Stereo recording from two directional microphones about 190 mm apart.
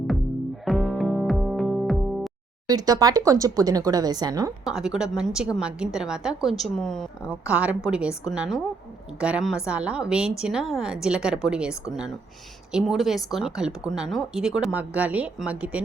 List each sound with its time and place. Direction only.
0.6 s music: centre (ahead or behind)
2.6 s speech: 20° right (ahead or behind)
4.6 s a woman's voice: 5° right (ahead or behind)